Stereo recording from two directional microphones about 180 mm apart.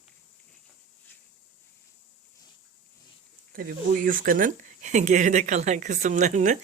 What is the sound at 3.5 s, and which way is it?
Speech, 50° right (ahead or behind).